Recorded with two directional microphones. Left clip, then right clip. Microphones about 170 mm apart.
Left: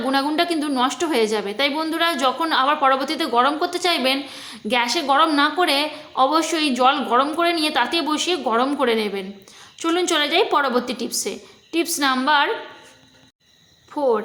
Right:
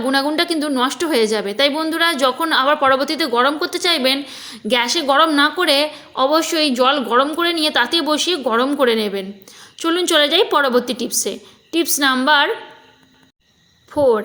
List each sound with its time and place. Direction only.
0.0 s a woman's voice: 20° right (ahead or behind)
13.9 s speech: 25° right (ahead or behind)